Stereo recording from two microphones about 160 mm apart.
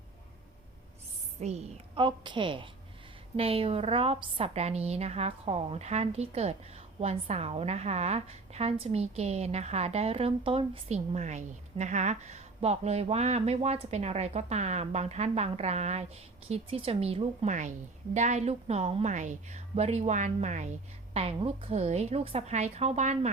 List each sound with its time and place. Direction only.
1.4 s a woman's voice: 45° right (ahead or behind)